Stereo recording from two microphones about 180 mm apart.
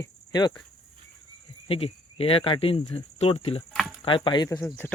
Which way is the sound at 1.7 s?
30° left (ahead or behind).